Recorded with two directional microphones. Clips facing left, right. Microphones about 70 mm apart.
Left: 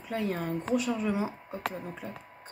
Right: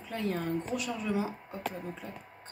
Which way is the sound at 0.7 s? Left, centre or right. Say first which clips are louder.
Left 4 dB; left.